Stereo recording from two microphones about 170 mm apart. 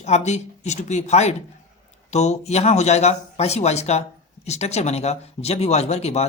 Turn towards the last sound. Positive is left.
turn(degrees=40)  # may be behind; listen again after turning